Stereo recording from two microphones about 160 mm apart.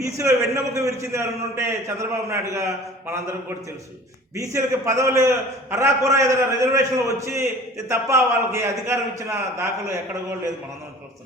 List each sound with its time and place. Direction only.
0.0 s a man's voice: 20° right (ahead or behind)
4.4 s a man's voice: 20° right (ahead or behind)